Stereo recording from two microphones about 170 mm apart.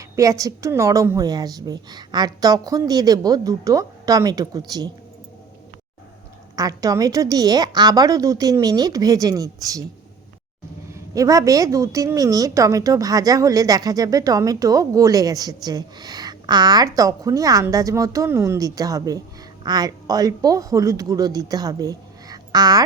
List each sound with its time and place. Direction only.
0.0 s a woman's voice: 20° right (ahead or behind)
6.6 s a woman's voice: 20° right (ahead or behind)
10.9 s a woman's voice: 20° right (ahead or behind)